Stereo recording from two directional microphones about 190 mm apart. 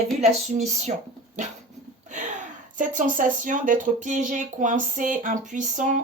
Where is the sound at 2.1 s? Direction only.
40° right (ahead or behind).